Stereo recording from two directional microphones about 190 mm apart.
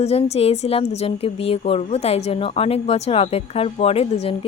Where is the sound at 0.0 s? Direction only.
35° left (ahead or behind).